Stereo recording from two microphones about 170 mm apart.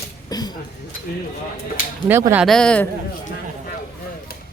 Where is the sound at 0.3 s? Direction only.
20° left (ahead or behind).